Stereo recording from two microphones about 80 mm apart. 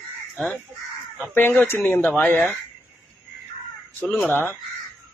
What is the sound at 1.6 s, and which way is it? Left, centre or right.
Speech, left.